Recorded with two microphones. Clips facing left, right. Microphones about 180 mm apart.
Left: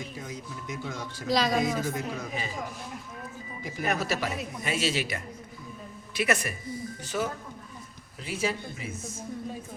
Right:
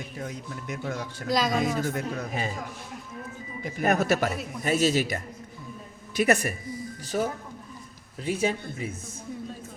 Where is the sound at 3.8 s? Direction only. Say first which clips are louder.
Right 6 dB; 50° right (ahead or behind).